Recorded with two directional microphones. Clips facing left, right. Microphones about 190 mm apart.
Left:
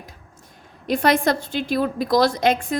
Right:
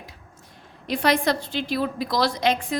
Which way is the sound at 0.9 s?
50° left (ahead or behind).